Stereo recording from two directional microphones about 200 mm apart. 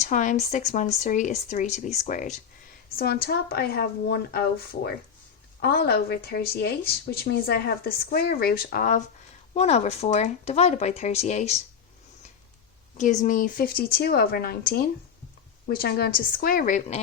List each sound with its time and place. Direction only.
0.0 s speech: 40° left (ahead or behind)
2.9 s speech: 50° left (ahead or behind); by 11.6 s 35° left (ahead or behind)
13.0 s speech: 35° left (ahead or behind)